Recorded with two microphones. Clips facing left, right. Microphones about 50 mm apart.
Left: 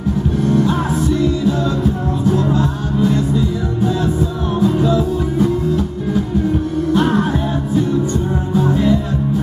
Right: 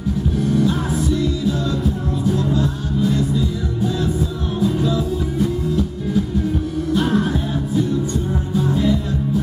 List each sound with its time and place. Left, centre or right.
0.4 s music: centre
3.0 s music: centre
8.5 s music: centre